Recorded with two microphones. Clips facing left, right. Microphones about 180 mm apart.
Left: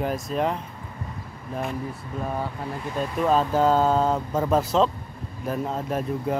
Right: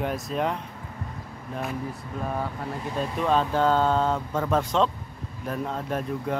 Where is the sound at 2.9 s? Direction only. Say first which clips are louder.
Left 2 dB; 5° left (ahead or behind).